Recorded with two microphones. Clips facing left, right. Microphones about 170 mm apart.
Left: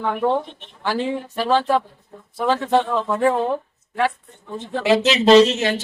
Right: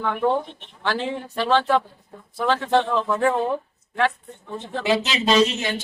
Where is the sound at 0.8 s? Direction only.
10° left (ahead or behind).